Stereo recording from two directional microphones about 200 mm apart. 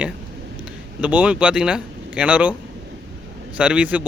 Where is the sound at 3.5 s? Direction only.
5° right (ahead or behind).